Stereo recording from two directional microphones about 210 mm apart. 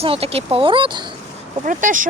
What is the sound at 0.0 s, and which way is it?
Speech, 30° right (ahead or behind).